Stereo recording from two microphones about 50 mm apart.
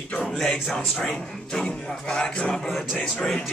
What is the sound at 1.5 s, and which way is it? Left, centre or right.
Speech, centre.